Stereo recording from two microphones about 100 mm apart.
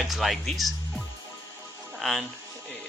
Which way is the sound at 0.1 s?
Centre (ahead or behind).